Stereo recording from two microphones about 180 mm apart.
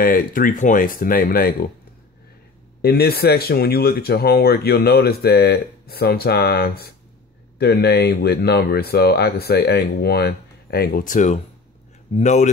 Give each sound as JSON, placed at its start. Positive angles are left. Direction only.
{"t": 0.0, "sound": "speech", "side_deg": 50}
{"t": 2.8, "sound": "speech", "side_deg": 60}